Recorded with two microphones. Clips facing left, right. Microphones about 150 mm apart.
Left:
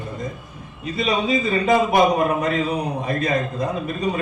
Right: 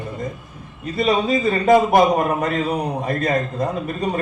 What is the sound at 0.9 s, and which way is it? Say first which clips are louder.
A man's voice: right 3 dB; 55° right (ahead or behind).